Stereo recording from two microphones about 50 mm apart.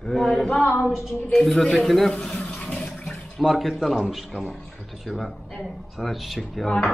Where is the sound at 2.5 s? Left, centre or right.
Centre.